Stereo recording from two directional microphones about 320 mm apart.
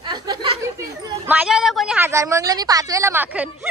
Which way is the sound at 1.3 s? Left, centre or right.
Centre.